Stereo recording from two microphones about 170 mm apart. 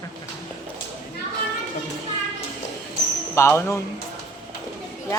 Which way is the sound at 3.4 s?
15° left (ahead or behind).